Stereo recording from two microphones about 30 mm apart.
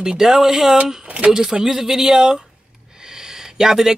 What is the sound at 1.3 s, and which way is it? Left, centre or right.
Speech, centre.